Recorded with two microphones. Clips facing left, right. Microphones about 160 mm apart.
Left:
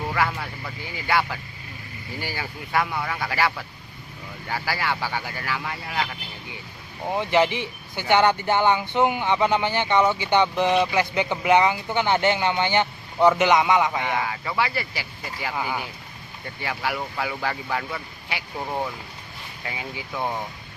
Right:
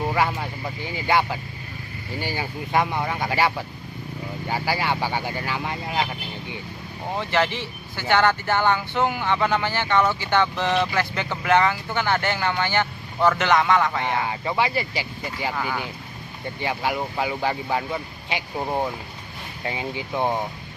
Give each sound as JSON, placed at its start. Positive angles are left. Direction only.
{"t": 0.1, "sound": "speech", "side_deg": -20}
{"t": 7.2, "sound": "speech", "side_deg": 15}
{"t": 14.0, "sound": "speech", "side_deg": -25}
{"t": 15.5, "sound": "speech", "side_deg": 15}
{"t": 16.6, "sound": "speech", "side_deg": -20}